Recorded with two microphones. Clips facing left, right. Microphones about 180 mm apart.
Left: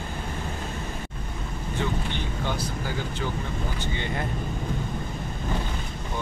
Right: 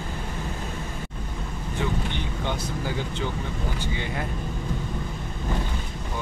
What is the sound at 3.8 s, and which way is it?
Speech, 5° right (ahead or behind).